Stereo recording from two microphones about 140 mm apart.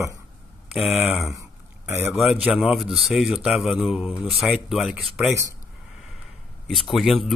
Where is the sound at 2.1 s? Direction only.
5° right (ahead or behind).